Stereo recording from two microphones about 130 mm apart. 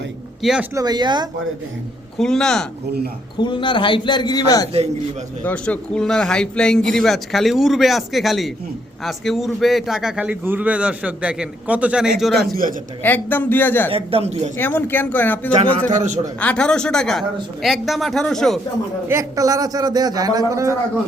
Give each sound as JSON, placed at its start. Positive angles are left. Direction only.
{"t": 0.7, "sound": "speech", "side_deg": -30}
{"t": 2.1, "sound": "speech", "side_deg": 5}
{"t": 3.3, "sound": "a man's voice", "side_deg": 35}
{"t": 5.4, "sound": "a man's voice", "side_deg": 10}
{"t": 13.0, "sound": "speech", "side_deg": 15}
{"t": 13.9, "sound": "a man's voice", "side_deg": -50}
{"t": 14.6, "sound": "speech", "side_deg": 15}
{"t": 15.9, "sound": "a man's voice", "side_deg": -70}
{"t": 16.4, "sound": "speech", "side_deg": 10}
{"t": 19.0, "sound": "a man's voice", "side_deg": -25}